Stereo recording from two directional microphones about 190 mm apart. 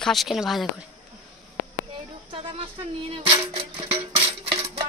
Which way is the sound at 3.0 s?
30° right (ahead or behind).